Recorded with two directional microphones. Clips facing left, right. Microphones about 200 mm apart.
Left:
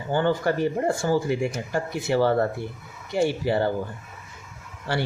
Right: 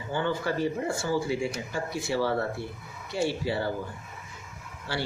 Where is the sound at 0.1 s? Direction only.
55° left (ahead or behind).